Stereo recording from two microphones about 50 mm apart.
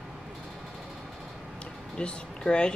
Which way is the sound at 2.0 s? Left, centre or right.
Left.